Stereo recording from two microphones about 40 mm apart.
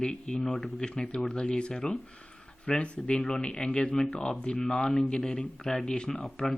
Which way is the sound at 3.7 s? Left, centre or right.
Left.